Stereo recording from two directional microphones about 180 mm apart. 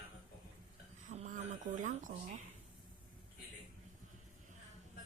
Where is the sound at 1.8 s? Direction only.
45° right (ahead or behind).